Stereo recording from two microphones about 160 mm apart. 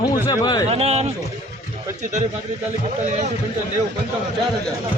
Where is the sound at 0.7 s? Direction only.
40° right (ahead or behind).